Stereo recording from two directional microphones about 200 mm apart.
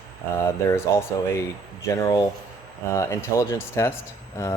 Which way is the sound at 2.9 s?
15° left (ahead or behind).